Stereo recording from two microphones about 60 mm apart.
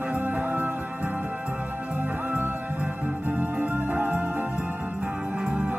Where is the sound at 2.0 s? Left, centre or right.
Right.